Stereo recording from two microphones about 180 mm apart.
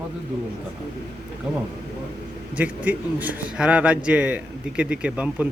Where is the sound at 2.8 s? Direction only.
10° right (ahead or behind).